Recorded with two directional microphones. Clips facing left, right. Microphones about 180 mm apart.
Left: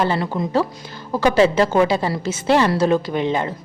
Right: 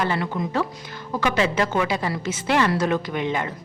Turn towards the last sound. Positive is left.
turn(degrees=30)  # may be behind; listen again after turning